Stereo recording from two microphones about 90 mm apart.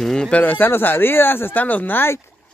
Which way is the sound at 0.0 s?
5° left (ahead or behind).